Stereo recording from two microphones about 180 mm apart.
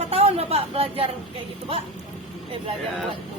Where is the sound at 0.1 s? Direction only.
35° right (ahead or behind).